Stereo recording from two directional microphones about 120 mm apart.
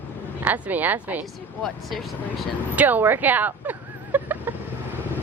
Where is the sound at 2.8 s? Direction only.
15° right (ahead or behind).